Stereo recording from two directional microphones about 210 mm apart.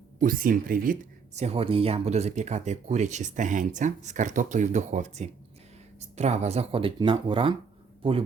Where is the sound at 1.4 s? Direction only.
30° right (ahead or behind).